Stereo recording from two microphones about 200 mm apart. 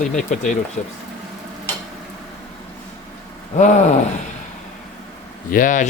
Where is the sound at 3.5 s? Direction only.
35° left (ahead or behind).